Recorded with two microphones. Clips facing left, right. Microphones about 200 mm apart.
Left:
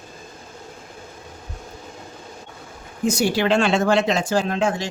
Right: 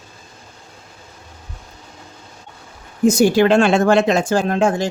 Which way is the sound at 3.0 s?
45° right (ahead or behind).